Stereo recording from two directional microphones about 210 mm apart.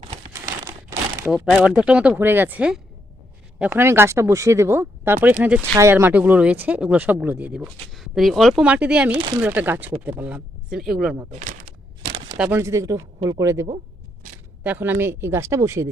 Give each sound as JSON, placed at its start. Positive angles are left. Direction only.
{"t": 0.6, "sound": "crumpling", "side_deg": -10}
{"t": 1.5, "sound": "speech", "side_deg": 0}
{"t": 11.3, "sound": "a sound", "side_deg": -40}
{"t": 12.4, "sound": "speech", "side_deg": -10}